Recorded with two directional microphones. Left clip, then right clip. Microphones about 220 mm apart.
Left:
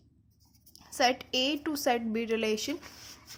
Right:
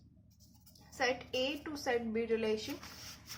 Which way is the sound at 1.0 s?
45° left (ahead or behind).